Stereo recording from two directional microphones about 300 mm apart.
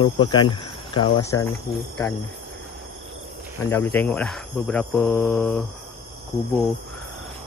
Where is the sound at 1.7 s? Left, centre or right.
Centre.